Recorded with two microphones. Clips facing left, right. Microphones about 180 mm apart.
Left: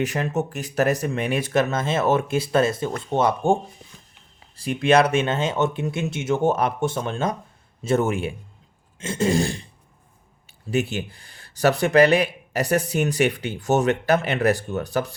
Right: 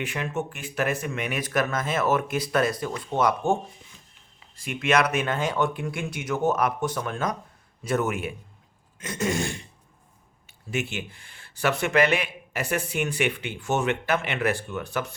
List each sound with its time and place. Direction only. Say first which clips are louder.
0.0 s a man's voice: left 6 dB; 40° left (ahead or behind)
10.7 s a man's voice: left 6 dB; 35° left (ahead or behind)